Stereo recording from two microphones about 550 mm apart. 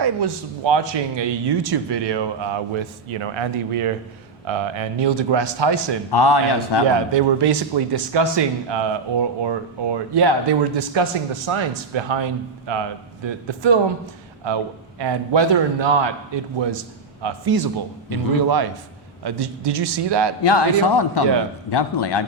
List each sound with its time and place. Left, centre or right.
0.0 s speech: right
6.1 s a man's voice: left
6.9 s a man's voice: right
20.4 s a man's voice: left